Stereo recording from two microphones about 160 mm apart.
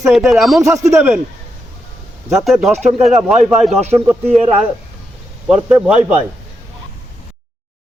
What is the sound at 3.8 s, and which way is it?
Speech, 45° right (ahead or behind).